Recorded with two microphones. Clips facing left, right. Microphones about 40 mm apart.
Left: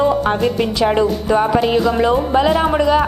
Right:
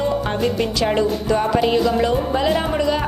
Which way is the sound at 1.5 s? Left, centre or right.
Centre.